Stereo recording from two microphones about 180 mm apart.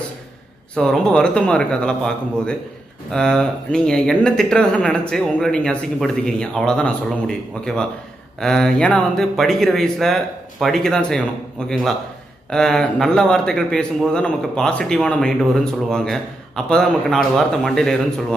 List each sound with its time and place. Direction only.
0.7 s a man's voice: 5° left (ahead or behind)
12.4 s a man's voice: 5° left (ahead or behind)